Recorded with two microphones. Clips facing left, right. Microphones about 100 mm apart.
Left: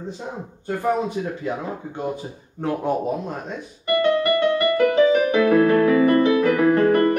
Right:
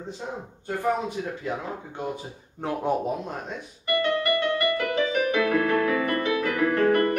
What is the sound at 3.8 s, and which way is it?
Music, 30° left (ahead or behind).